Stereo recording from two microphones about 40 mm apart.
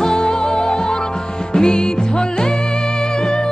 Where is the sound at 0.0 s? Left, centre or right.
Centre.